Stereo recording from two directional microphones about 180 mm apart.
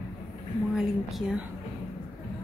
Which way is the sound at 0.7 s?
5° right (ahead or behind).